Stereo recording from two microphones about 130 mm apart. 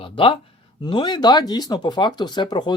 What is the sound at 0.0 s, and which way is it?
Speech, 45° left (ahead or behind).